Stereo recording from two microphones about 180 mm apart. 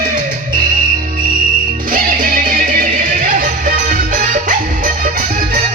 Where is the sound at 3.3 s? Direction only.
50° right (ahead or behind).